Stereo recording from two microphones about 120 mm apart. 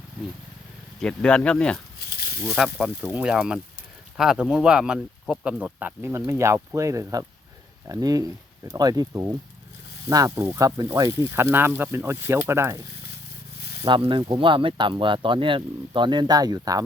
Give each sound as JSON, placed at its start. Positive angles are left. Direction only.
{"t": 0.9, "sound": "speech", "side_deg": 5}
{"t": 2.6, "sound": "speech", "side_deg": -5}
{"t": 13.8, "sound": "speech", "side_deg": -45}